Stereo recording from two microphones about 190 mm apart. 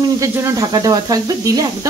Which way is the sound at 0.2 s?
15° right (ahead or behind).